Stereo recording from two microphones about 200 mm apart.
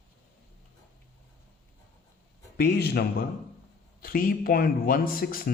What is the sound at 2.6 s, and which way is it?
Speech, 55° left (ahead or behind).